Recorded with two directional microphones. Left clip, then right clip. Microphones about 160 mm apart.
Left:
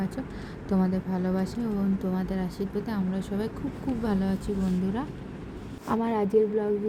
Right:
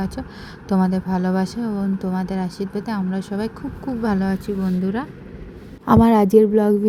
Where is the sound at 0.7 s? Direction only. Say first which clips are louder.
Right 7 dB; 50° right (ahead or behind); by 5.0 s 30° right (ahead or behind).